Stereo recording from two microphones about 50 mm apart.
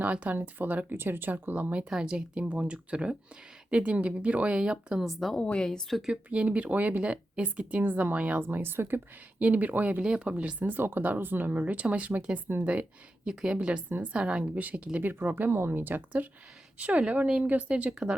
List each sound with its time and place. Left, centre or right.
0.0 s speech: right
1.3 s speech: right
1.9 s speech: centre
4.6 s speech: centre
5.4 s speech: centre
6.0 s speech: centre
8.4 s speech: right
9.4 s speech: right
10.7 s speech: right
14.9 s speech: right